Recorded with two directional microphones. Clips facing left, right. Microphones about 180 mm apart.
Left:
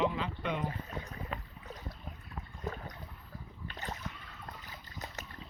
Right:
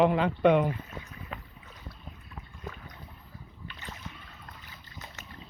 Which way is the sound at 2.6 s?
40° left (ahead or behind).